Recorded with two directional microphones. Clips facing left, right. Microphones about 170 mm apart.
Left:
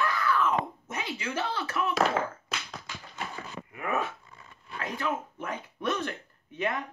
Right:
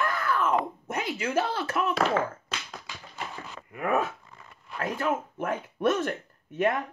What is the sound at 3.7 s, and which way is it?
Dog, 40° right (ahead or behind).